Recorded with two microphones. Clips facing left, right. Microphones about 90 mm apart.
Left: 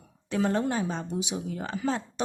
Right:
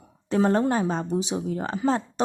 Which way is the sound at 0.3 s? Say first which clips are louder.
Right 5 dB; 40° right (ahead or behind).